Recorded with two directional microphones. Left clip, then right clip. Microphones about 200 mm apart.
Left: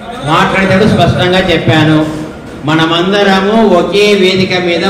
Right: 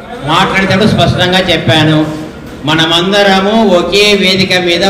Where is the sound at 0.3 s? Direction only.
60° right (ahead or behind).